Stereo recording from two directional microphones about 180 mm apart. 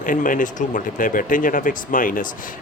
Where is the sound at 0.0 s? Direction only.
50° left (ahead or behind).